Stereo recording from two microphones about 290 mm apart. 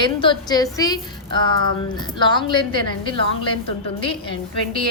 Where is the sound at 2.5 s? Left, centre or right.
Centre.